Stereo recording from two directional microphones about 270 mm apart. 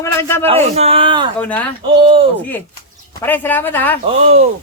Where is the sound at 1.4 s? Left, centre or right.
Centre.